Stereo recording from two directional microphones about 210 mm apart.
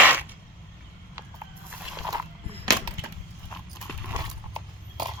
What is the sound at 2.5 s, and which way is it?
Chop, 20° right (ahead or behind).